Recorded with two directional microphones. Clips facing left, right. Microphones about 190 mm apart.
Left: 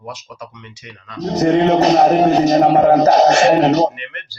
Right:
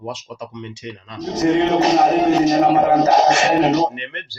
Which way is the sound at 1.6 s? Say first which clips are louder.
Left 3 dB; 35° left (ahead or behind).